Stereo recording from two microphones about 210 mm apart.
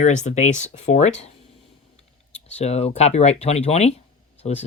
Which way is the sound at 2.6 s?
30° left (ahead or behind).